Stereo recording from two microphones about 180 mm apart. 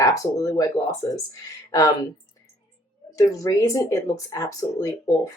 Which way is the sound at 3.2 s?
20° left (ahead or behind).